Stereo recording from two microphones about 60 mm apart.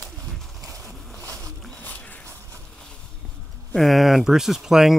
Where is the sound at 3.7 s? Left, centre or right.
Centre.